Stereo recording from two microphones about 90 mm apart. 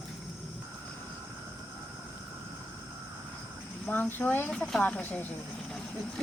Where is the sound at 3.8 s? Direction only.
20° left (ahead or behind).